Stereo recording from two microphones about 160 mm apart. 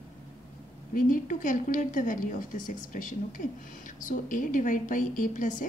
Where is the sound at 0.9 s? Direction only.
55° left (ahead or behind).